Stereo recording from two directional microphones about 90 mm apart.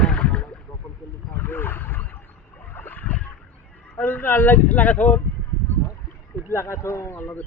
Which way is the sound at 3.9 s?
25° left (ahead or behind).